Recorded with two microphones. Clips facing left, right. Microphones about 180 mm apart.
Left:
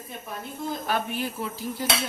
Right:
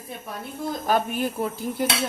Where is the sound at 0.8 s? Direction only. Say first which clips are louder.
Right 6 dB; 45° right (ahead or behind).